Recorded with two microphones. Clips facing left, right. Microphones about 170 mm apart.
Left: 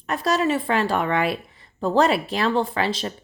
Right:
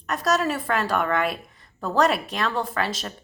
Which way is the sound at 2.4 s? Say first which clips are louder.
Left 5 dB; 30° left (ahead or behind).